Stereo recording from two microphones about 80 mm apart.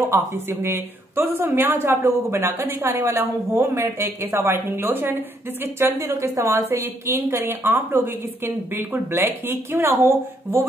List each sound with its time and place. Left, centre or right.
0.1 s a woman's voice: right
6.1 s a woman's voice: right